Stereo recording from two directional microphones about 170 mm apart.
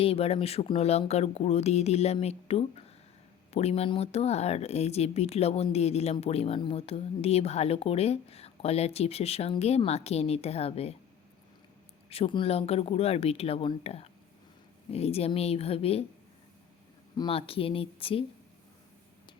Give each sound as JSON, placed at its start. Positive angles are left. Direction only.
{"t": 0.0, "sound": "speech", "side_deg": 35}
{"t": 12.0, "sound": "speech", "side_deg": 35}
{"t": 17.2, "sound": "speech", "side_deg": 30}